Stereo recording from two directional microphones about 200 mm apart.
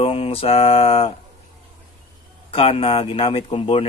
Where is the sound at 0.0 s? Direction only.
30° left (ahead or behind).